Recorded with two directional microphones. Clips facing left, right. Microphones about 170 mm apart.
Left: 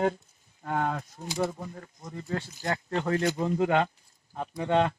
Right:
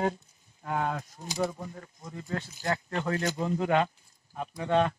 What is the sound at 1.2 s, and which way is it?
Speech, 25° left (ahead or behind).